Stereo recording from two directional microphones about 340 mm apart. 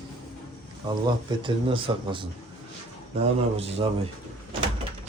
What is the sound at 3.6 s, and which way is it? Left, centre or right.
Speech, centre.